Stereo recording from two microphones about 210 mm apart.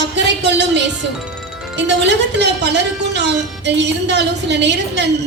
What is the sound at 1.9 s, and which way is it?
Speech, 55° right (ahead or behind).